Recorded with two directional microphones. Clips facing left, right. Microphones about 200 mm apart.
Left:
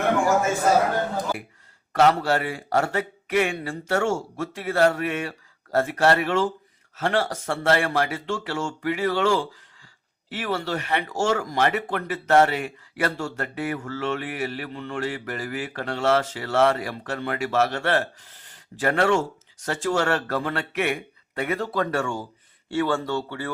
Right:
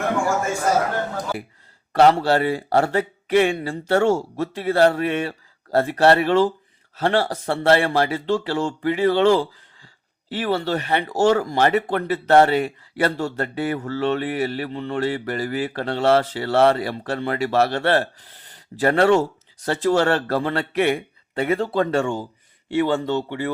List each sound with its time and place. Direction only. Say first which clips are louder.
1.9 s speech: right 4 dB; 30° right (ahead or behind)